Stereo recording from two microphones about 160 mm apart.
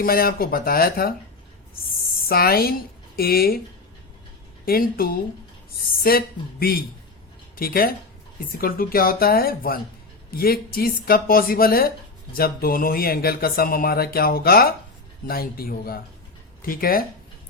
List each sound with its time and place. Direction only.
0.0 s speech: 65° left (ahead or behind)
2.2 s speech: 70° left (ahead or behind)
4.6 s speech: 65° left (ahead or behind)